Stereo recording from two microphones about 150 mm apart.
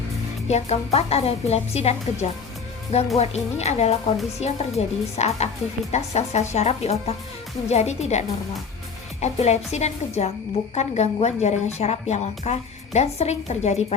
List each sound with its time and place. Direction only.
0.4 s a woman's voice: 45° left (ahead or behind)
9.2 s a woman's voice: 50° left (ahead or behind)